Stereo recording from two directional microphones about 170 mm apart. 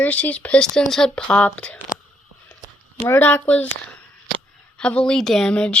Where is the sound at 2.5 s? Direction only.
15° left (ahead or behind).